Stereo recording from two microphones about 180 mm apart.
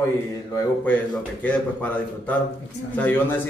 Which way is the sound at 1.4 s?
10° left (ahead or behind).